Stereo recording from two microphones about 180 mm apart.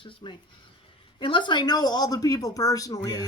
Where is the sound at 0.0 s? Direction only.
25° left (ahead or behind).